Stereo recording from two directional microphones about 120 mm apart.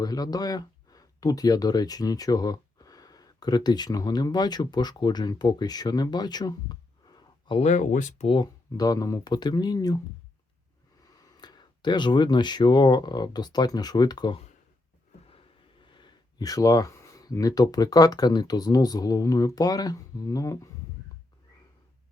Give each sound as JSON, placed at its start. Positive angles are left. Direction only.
{"t": 0.0, "sound": "speech", "side_deg": 30}
{"t": 7.6, "sound": "speech", "side_deg": 85}
{"t": 8.7, "sound": "speech", "side_deg": 30}
{"t": 11.3, "sound": "speech", "side_deg": 35}
{"t": 15.8, "sound": "speech", "side_deg": 40}